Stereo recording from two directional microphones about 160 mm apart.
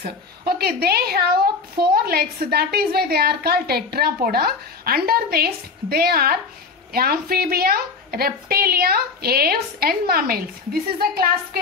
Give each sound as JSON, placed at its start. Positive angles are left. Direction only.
{"t": 0.0, "sound": "a woman's voice", "side_deg": -70}